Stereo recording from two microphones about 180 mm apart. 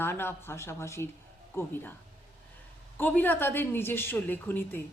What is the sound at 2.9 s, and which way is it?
Speech, 10° left (ahead or behind).